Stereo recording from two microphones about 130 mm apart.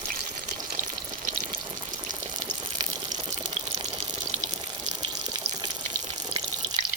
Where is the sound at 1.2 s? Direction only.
70° right (ahead or behind).